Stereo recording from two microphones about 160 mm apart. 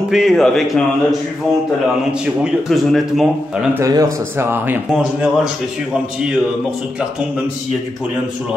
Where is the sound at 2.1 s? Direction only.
5° right (ahead or behind).